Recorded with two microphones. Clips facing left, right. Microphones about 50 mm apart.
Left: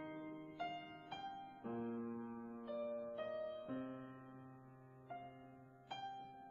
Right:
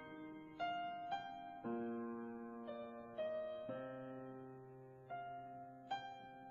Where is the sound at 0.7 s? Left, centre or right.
Centre.